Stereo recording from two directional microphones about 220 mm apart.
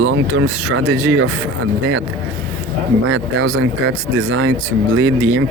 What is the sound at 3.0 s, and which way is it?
Speech, 65° right (ahead or behind).